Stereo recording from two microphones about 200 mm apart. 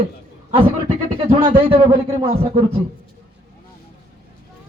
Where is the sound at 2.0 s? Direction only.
20° right (ahead or behind).